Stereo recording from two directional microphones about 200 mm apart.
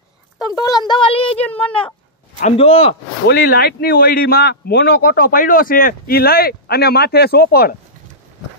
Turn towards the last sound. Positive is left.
turn(degrees=50)  # may be behind; listen again after turning